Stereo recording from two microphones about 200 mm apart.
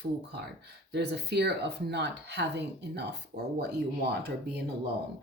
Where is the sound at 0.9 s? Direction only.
55° right (ahead or behind).